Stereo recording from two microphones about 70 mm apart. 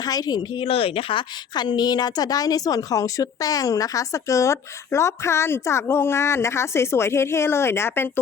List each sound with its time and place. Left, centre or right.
0.0 s a woman's voice: left
1.5 s a woman's voice: left